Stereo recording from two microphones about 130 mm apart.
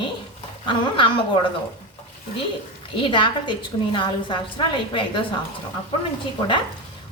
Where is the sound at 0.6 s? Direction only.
40° left (ahead or behind).